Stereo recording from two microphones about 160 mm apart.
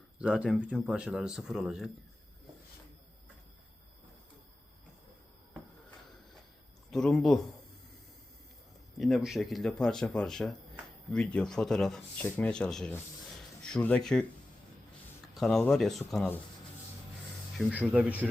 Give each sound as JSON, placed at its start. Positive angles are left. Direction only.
{"t": 0.2, "sound": "speech", "side_deg": -5}
{"t": 6.9, "sound": "speech", "side_deg": 5}
{"t": 9.0, "sound": "speech", "side_deg": 0}
{"t": 15.4, "sound": "speech", "side_deg": 5}
{"t": 17.7, "sound": "speech", "side_deg": -10}